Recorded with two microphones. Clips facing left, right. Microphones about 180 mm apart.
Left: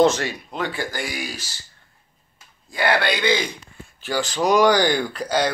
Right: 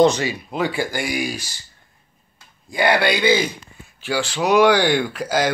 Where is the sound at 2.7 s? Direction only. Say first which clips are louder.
Right 3 dB; 15° right (ahead or behind).